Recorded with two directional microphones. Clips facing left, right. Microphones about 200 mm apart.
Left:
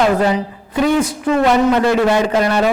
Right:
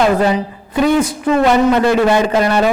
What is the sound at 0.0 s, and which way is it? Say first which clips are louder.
A woman's voice: right 1 dB; 15° right (ahead or behind).